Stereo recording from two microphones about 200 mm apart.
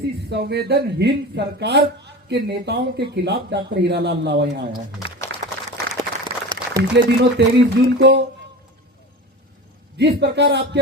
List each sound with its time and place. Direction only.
0.3 s speech: 55° right (ahead or behind)
5.3 s applause: 65° right (ahead or behind)
6.2 s a sound: 20° right (ahead or behind)
6.9 s speech: 60° right (ahead or behind)
10.0 s speech: 55° right (ahead or behind)